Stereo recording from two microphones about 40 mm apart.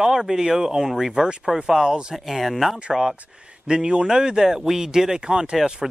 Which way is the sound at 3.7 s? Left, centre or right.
Right.